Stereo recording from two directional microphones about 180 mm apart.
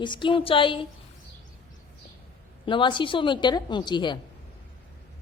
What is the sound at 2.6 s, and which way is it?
Speech, 25° left (ahead or behind).